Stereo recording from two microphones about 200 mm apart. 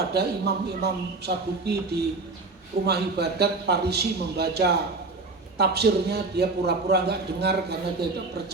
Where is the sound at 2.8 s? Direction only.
55° right (ahead or behind).